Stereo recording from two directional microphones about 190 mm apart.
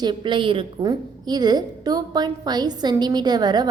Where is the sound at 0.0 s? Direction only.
25° right (ahead or behind).